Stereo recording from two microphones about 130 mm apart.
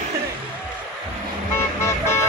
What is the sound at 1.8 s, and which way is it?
Vehicle, 20° left (ahead or behind).